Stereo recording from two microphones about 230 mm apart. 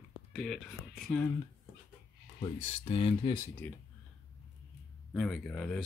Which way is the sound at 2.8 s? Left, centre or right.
Left.